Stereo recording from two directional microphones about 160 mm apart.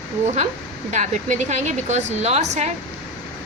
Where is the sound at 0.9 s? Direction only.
50° right (ahead or behind).